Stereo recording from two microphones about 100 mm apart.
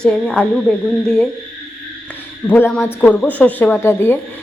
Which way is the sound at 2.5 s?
20° left (ahead or behind).